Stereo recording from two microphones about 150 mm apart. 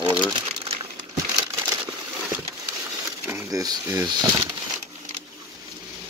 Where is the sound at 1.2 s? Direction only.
35° right (ahead or behind).